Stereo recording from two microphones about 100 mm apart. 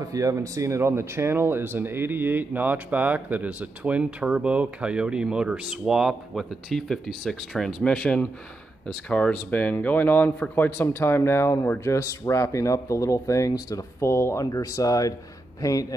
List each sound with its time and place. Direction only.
0.0 s speech: 35° right (ahead or behind); by 15.9 s 35° left (ahead or behind)